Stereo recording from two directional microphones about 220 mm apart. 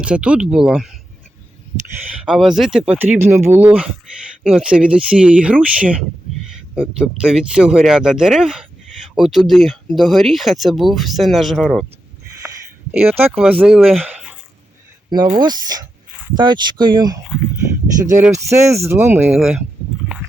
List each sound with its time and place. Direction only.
0.0 s speech: 5° right (ahead or behind)
2.2 s speech: centre (ahead or behind)
12.4 s speech: 10° right (ahead or behind)
15.4 s speech: 20° right (ahead or behind)
18.4 s speech: 15° right (ahead or behind)
20.1 s dog: 5° right (ahead or behind)